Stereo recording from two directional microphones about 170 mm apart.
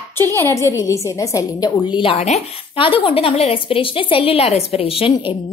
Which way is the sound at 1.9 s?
30° left (ahead or behind).